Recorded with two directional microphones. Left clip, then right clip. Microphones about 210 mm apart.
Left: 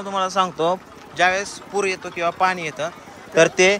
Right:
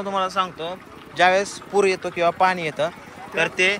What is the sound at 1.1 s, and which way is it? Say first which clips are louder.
Speech: right 1 dB; 5° left (ahead or behind).